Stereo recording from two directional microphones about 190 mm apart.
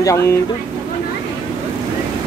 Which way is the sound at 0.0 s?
15° left (ahead or behind).